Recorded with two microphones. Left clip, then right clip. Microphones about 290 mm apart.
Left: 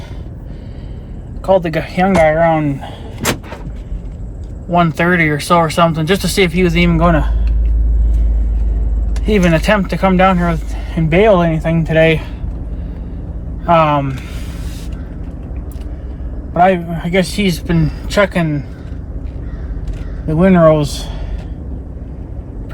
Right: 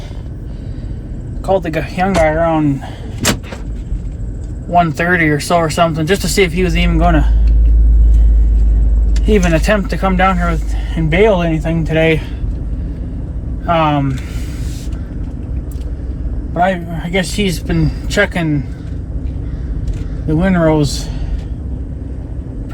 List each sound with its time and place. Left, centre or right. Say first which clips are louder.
1.5 s speech: left 2 dB; centre
4.7 s speech: right 1 dB; centre
9.2 s speech: even; centre
13.7 s speech: left 3 dB; centre
16.6 s speech: left 3 dB; centre
20.4 s speech: left 4 dB; centre